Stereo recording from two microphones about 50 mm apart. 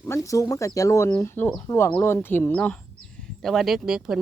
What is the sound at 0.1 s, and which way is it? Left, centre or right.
Speech, left.